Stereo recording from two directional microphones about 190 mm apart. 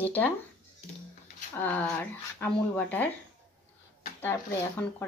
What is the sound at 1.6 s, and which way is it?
Speech, 10° left (ahead or behind).